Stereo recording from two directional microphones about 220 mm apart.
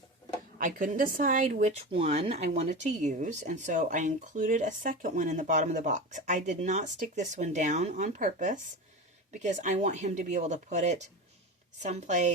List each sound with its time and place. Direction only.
0.6 s a woman's voice: 35° right (ahead or behind)